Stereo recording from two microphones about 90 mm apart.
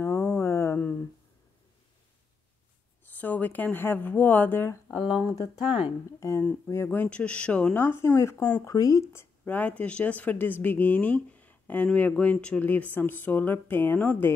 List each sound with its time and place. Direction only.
0.0 s a sound: 30° left (ahead or behind)
3.1 s speech: 20° left (ahead or behind)
4.9 s speech: 10° right (ahead or behind)
5.2 s speech: 35° left (ahead or behind)
8.6 s speech: 35° left (ahead or behind)
9.4 s speech: 15° left (ahead or behind)